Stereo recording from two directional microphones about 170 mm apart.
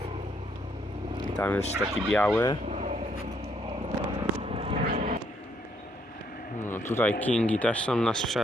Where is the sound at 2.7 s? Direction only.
40° right (ahead or behind).